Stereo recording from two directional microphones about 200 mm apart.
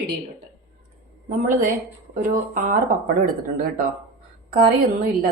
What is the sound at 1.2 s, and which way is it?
A woman's voice, 40° right (ahead or behind).